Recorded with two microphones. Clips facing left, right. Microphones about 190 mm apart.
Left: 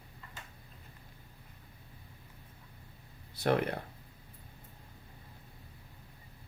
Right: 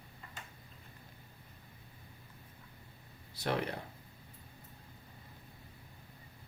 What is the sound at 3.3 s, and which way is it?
Speech, 55° left (ahead or behind).